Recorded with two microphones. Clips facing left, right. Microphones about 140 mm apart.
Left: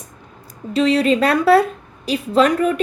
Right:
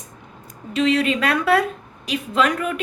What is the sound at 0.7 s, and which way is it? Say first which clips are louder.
A woman's voice: left 4 dB; 35° left (ahead or behind).